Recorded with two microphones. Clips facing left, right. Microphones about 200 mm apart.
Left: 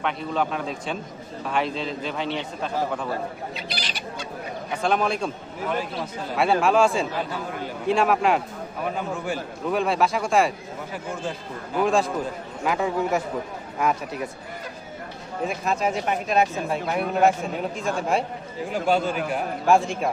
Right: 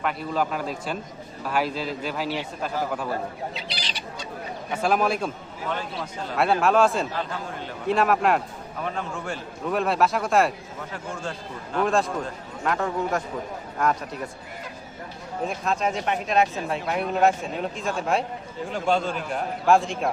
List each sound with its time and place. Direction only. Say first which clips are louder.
0.0 s speech: even; 5° right (ahead or behind)
3.5 s bird: left 2 dB; 50° left (ahead or behind)
4.7 s speech: right 1 dB; 5° right (ahead or behind)
15.4 s speech: left 1 dB; 5° left (ahead or behind)